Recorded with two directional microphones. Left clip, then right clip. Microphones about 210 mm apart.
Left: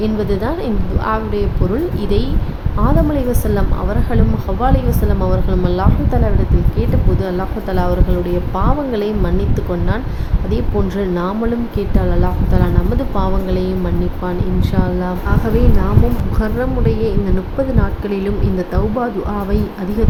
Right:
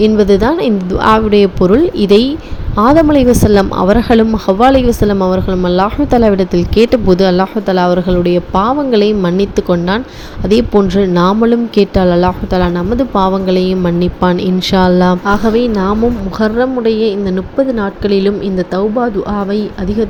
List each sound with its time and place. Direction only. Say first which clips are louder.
0.0 s a woman's voice: right 10 dB; 30° right (ahead or behind)
16.4 s a woman's voice: right 8 dB; 15° right (ahead or behind)